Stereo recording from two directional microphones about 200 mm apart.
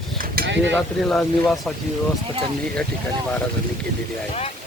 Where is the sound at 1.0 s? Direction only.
5° left (ahead or behind).